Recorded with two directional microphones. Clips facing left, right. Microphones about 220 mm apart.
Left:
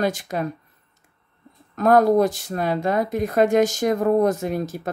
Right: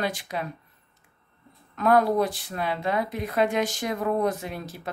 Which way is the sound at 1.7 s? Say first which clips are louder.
Left 5 dB; 45° left (ahead or behind).